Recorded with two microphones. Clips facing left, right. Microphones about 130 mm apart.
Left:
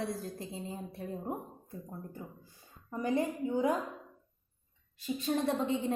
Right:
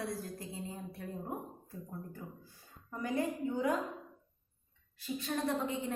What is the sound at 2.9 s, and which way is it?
Speech, 20° left (ahead or behind).